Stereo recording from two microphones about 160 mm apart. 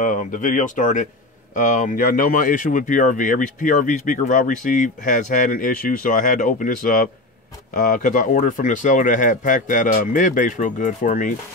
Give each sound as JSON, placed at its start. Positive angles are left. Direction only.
{"t": 0.0, "sound": "speech", "side_deg": 55}